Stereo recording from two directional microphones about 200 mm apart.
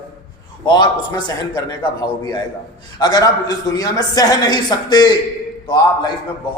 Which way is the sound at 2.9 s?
20° left (ahead or behind).